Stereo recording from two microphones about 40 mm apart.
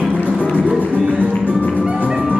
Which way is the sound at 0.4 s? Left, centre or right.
Left.